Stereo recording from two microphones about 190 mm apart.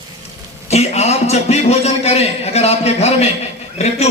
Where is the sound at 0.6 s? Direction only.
35° left (ahead or behind).